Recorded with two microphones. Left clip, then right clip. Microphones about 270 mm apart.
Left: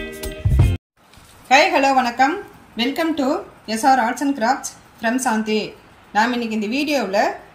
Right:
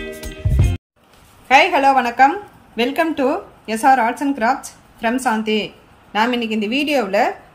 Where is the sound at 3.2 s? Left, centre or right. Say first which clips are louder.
Right 2 dB; centre.